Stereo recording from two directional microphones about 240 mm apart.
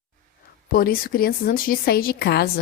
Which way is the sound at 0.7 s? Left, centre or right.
Left.